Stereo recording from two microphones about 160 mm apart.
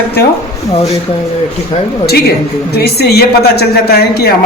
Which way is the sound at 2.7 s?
85° left.